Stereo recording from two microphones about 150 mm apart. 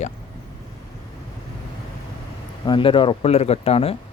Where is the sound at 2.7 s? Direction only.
35° left (ahead or behind).